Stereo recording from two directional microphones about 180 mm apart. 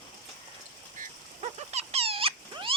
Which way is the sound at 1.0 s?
35° right (ahead or behind).